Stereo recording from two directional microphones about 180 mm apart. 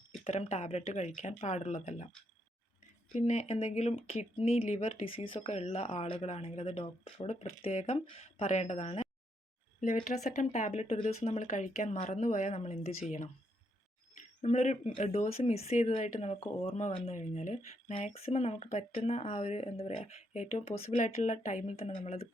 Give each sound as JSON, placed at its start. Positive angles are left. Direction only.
{"t": 0.3, "sound": "speech", "side_deg": 35}
{"t": 3.2, "sound": "speech", "side_deg": 40}
{"t": 14.4, "sound": "speech", "side_deg": 40}